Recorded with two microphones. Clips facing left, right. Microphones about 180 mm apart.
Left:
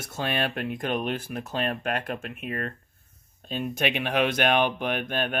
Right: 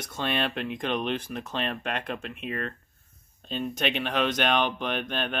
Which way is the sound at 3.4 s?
10° left (ahead or behind).